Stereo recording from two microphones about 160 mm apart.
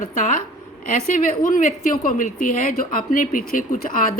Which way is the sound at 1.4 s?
60° left (ahead or behind).